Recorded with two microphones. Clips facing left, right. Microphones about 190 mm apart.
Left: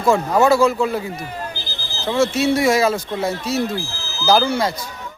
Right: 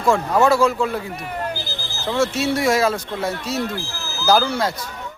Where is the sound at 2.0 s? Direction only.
Centre (ahead or behind).